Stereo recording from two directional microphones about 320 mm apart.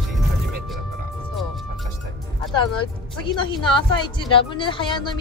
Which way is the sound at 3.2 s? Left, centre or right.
Centre.